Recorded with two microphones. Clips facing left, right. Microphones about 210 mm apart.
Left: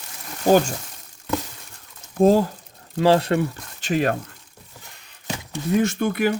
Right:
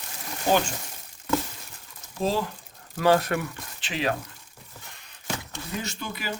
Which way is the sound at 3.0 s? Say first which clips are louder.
Left 4 dB; 30° left (ahead or behind).